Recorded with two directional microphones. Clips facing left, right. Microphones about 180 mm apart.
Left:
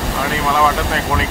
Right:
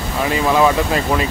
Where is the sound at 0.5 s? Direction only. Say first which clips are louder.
Right 2 dB; 5° right (ahead or behind).